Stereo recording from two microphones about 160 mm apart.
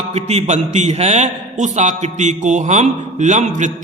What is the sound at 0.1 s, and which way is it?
A man's voice, 45° right (ahead or behind).